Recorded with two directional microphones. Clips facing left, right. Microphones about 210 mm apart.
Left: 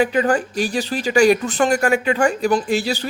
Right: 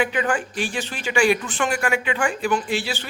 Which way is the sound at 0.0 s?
40° left (ahead or behind).